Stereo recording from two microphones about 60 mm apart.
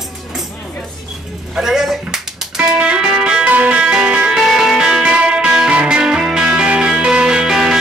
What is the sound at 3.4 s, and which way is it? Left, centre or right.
Music, right.